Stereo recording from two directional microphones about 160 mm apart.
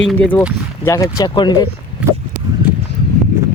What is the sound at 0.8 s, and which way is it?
Speech, 20° left (ahead or behind).